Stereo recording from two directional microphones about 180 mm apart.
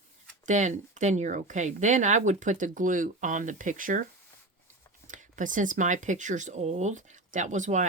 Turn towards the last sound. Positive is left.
turn(degrees=-40)  # may be behind; listen again after turning